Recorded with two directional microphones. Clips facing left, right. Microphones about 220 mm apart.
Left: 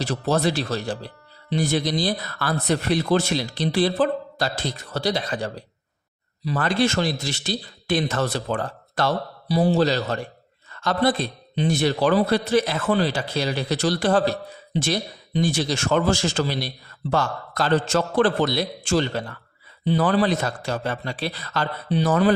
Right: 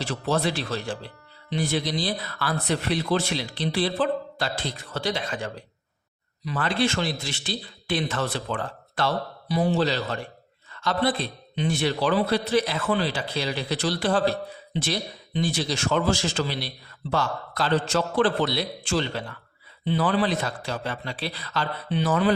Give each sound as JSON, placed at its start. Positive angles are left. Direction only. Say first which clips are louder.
{"t": 0.0, "sound": "a man's voice", "louder": "left 3 dB", "side_deg": 40}